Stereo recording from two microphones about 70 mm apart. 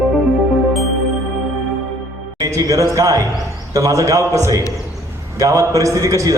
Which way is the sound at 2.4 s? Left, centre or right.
Right.